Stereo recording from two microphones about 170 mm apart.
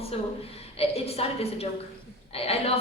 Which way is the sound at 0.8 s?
35° left (ahead or behind).